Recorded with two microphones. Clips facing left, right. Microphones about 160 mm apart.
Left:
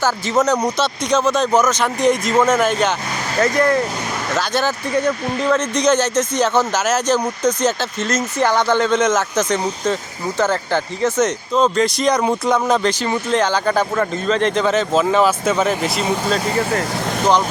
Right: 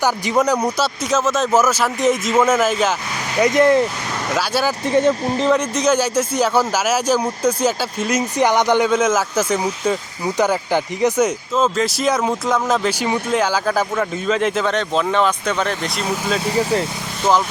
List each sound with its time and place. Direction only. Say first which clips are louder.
0.0 s speech: even; 15° right (ahead or behind)
3.3 s speech: right 3 dB; 20° right (ahead or behind)
4.3 s speech: even; 10° right (ahead or behind)
4.9 s speech: right 3 dB; 25° right (ahead or behind)
5.4 s speech: even; 15° right (ahead or behind)